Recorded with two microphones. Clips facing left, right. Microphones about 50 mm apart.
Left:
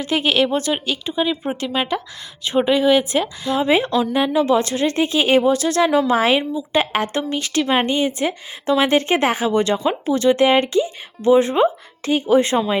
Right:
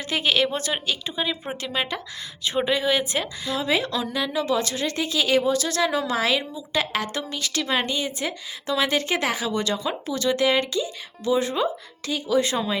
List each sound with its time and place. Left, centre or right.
0.0 s a woman's voice: left
0.3 s speech: centre
3.5 s a woman's voice: left
5.6 s a woman's voice: left
6.1 s a woman's voice: left